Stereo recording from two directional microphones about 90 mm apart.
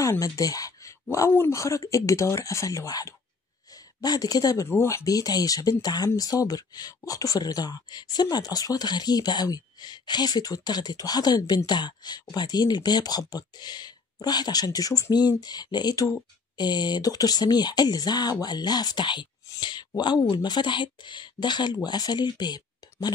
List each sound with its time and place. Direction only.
0.0 s speech: 40° left (ahead or behind)
4.6 s speech: 30° left (ahead or behind); by 19.2 s 55° left (ahead or behind)
19.6 s a sound: 55° left (ahead or behind)
20.0 s speech: 55° left (ahead or behind)